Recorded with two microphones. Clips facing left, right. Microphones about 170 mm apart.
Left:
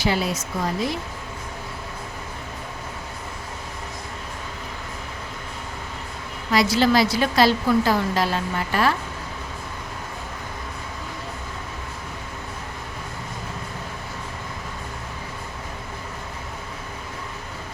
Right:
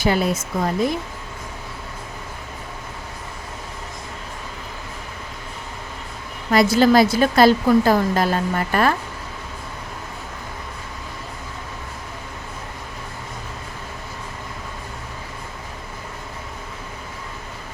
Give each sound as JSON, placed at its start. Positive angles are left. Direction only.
{"t": 0.0, "sound": "a woman's voice", "side_deg": -50}
{"t": 6.5, "sound": "a woman's voice", "side_deg": -50}